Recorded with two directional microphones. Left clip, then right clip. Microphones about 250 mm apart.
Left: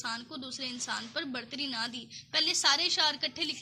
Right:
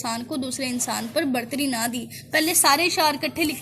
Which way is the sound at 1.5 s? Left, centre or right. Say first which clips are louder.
Right 9 dB; left.